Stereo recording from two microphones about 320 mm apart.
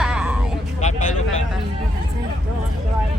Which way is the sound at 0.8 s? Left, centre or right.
Left.